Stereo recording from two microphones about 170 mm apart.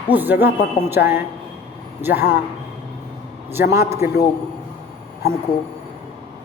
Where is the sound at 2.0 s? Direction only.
15° right (ahead or behind).